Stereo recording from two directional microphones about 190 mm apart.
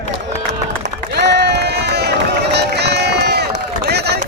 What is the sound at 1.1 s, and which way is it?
Run, 60° right (ahead or behind).